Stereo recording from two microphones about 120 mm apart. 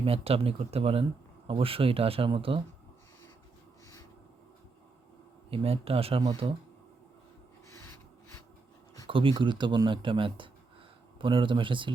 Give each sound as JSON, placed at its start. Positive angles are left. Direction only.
{"t": 0.0, "sound": "speech", "side_deg": -55}
{"t": 5.5, "sound": "speech", "side_deg": -55}
{"t": 9.0, "sound": "speech", "side_deg": -45}